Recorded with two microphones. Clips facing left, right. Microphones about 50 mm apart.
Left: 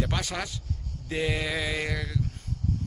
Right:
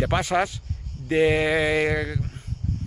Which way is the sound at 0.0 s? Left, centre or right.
Right.